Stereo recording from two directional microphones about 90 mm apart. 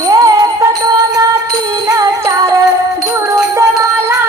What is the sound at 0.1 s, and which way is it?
Music, 40° right (ahead or behind).